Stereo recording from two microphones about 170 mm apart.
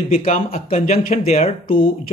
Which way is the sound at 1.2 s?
40° left (ahead or behind).